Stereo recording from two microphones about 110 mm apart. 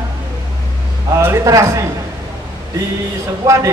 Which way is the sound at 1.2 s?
25° right (ahead or behind).